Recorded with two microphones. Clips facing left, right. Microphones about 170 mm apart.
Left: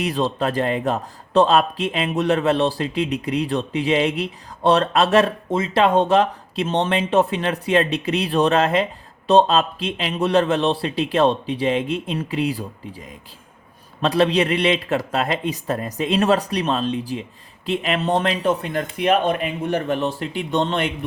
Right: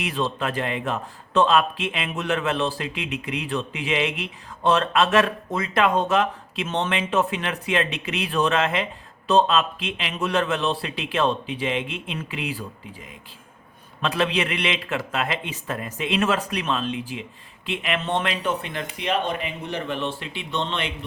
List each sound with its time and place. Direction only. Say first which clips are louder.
0.0 s a man's voice: left 5 dB; 35° left (ahead or behind)
14.0 s a man's voice: left 6 dB; 35° left (ahead or behind)